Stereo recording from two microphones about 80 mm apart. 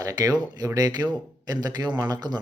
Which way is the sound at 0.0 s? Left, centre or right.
Right.